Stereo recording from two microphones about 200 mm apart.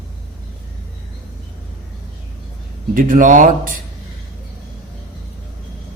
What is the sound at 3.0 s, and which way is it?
Speech, 45° right (ahead or behind).